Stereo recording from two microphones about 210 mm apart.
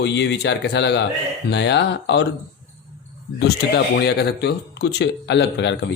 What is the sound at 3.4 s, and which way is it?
Speech, 50° left (ahead or behind).